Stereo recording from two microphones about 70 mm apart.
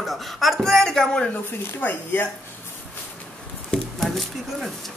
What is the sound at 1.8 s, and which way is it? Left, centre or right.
Speech, left.